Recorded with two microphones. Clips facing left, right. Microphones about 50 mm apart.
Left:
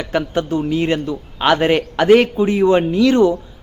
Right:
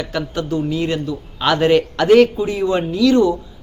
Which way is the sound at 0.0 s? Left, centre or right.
Left.